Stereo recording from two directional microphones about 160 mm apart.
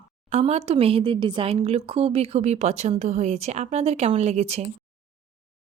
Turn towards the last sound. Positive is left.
turn(degrees=-40)  # may be behind; listen again after turning